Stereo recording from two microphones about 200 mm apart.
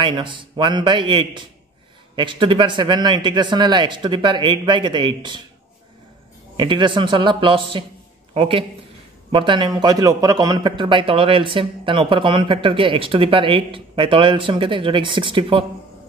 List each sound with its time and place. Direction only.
0.0 s speech: 25° right (ahead or behind)
6.5 s speech: 25° right (ahead or behind)